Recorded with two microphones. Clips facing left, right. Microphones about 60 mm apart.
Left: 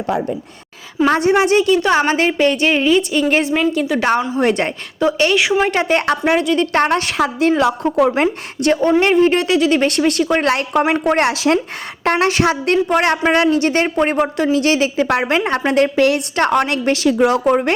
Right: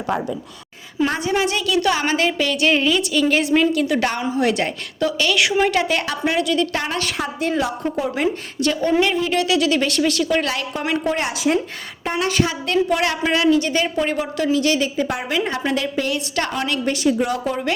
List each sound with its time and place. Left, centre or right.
1.2 s a woman's voice: left
3.7 s a woman's voice: centre
4.4 s a woman's voice: left
5.3 s a woman's voice: left
6.3 s a woman's voice: left
6.7 s a woman's voice: left
7.6 s a woman's voice: left
8.1 s a woman's voice: left
11.3 s a woman's voice: left
15.4 s a woman's voice: left
17.0 s speech: left